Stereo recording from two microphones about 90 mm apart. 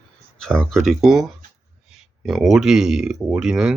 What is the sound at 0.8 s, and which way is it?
Speech, 5° right (ahead or behind).